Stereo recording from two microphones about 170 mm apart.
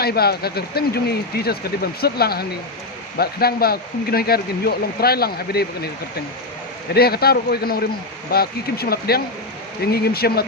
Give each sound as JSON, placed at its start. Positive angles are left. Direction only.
{"t": 0.0, "sound": "speech", "side_deg": 65}
{"t": 6.9, "sound": "speech", "side_deg": 65}